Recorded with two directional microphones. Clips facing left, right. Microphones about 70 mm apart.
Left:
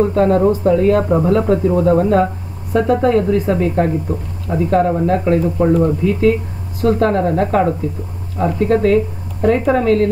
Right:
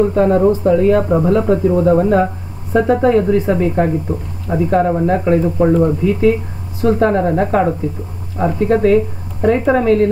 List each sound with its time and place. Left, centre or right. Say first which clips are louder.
0.0 s speech: right 1 dB; centre